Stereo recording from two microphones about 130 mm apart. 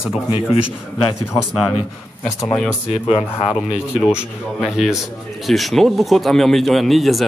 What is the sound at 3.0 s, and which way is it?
Speech, 40° left (ahead or behind).